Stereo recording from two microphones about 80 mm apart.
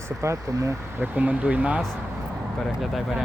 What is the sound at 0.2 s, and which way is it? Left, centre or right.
Speech, right.